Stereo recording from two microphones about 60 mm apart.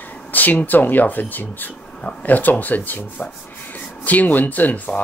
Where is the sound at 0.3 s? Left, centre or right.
Left.